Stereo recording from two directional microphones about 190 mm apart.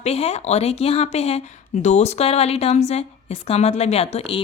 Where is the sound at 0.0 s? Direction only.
35° left (ahead or behind).